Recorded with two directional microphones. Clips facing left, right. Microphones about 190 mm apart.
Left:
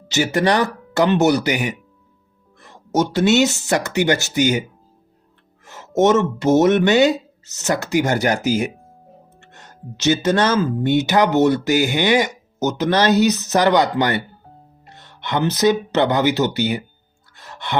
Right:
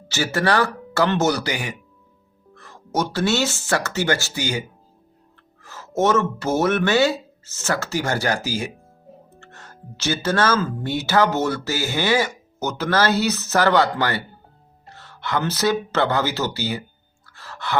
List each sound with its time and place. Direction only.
0.1 s speech: 20° left (ahead or behind)
5.6 s music: 20° left (ahead or behind)
6.0 s speech: 20° left (ahead or behind)
17.3 s sigh: 20° left (ahead or behind)